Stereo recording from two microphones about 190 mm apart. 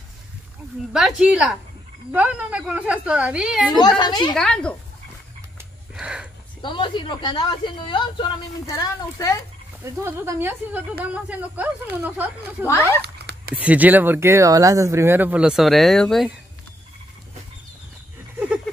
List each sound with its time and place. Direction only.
0.9 s a woman's voice: centre (ahead or behind)
4.0 s a woman's voice: 25° left (ahead or behind)
4.3 s a woman's voice: 5° left (ahead or behind)
5.9 s a sound: 5° right (ahead or behind)
6.6 s a woman's voice: 25° left (ahead or behind)
10.0 s speech: 10° right (ahead or behind)
12.6 s speech: 15° left (ahead or behind)
13.0 s a sound: 60° right (ahead or behind)
13.6 s speech: 10° right (ahead or behind)